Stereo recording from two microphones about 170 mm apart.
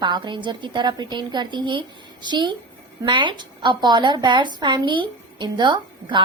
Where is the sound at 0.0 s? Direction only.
25° right (ahead or behind).